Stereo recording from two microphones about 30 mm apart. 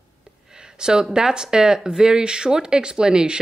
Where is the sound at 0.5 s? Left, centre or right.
Right.